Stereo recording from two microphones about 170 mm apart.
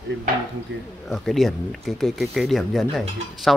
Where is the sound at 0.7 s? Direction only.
90° right.